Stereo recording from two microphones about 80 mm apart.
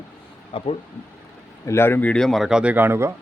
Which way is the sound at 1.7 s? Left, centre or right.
Left.